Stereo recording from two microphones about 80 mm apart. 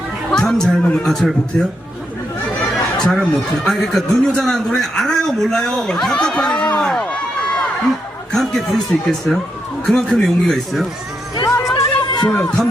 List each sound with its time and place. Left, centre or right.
0.3 s chatter: centre
1.0 s speech: centre
3.0 s a man's voice: centre
8.3 s speech: centre
11.7 s music: left
12.3 s a man's voice: centre